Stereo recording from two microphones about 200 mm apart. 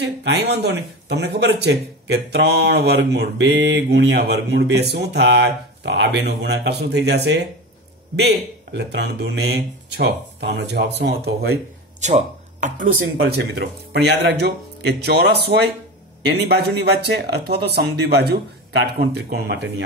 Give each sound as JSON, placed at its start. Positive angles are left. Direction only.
{"t": 0.0, "sound": "speech", "side_deg": -55}
{"t": 12.0, "sound": "speech", "side_deg": -35}
{"t": 13.9, "sound": "speech", "side_deg": -55}